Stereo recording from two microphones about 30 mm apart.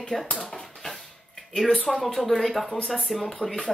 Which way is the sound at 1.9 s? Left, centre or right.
Centre.